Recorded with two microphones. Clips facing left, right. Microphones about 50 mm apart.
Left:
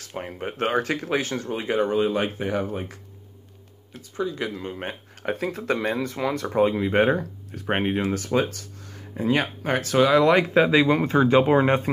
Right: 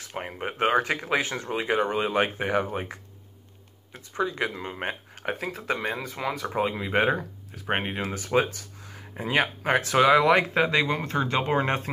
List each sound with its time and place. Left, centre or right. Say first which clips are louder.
0.0 s speech: left 1 dB; centre
4.6 s speech: even; right
5.3 s speech: left 4 dB; centre
8.1 s speech: left 1 dB; centre
10.5 s speech: left 5 dB; centre
10.9 s speech: left 8 dB; centre
11.4 s speech: left 6 dB; centre